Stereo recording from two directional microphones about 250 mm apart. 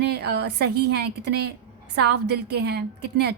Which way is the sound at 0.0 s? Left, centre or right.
Right.